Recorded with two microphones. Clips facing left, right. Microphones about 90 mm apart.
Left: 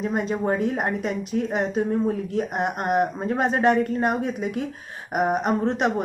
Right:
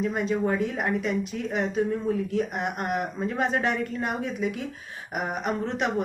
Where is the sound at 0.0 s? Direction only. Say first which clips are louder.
Left 1 dB; 35° left (ahead or behind).